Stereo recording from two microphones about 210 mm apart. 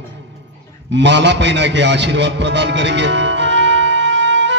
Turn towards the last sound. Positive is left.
turn(degrees=-60)  # may be behind; listen again after turning